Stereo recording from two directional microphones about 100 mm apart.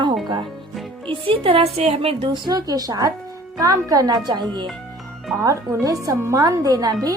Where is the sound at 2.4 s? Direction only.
40° right (ahead or behind).